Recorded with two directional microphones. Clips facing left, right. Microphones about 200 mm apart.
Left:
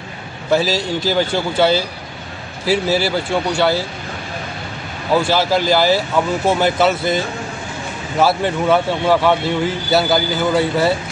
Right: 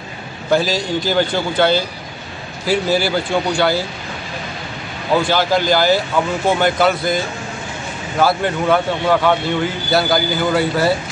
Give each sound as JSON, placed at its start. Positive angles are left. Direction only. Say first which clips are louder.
{"t": 0.5, "sound": "speech", "louder": "even", "side_deg": 5}
{"t": 5.3, "sound": "speech", "louder": "even", "side_deg": 5}
{"t": 8.2, "sound": "speech", "louder": "left 1 dB", "side_deg": 5}